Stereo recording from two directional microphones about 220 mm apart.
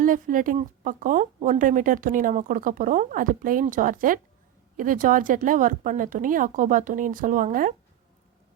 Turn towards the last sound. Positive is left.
turn(degrees=-35)  # may be behind; listen again after turning